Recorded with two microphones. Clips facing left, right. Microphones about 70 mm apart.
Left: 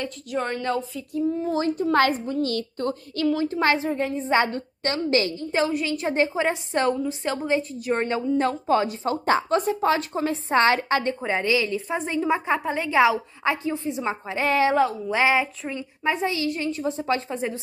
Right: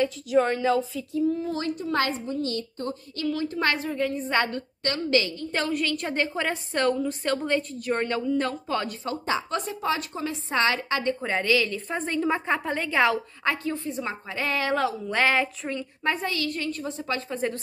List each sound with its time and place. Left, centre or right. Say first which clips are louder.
0.0 s speech: right 6 dB; centre
1.4 s a woman's voice: left 5 dB; left
1.8 s a child's voice: left 6 dB; left
3.3 s a woman's voice: left 4 dB; left
7.0 s a woman's voice: even; centre
8.0 s a woman's voice: left 3 dB; left
9.1 s a woman's voice: left 6 dB; left
11.1 s a woman's voice: left 1 dB; centre
11.9 s a woman's voice: left 2 dB; centre; by 14.8 s left
14.8 s a woman's voice: left 3 dB; centre; by 17.4 s left